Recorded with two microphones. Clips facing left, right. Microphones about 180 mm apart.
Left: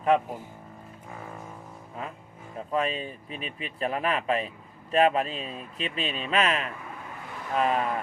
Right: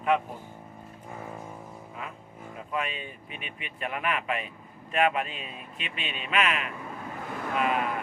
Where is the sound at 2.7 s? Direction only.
35° left (ahead or behind).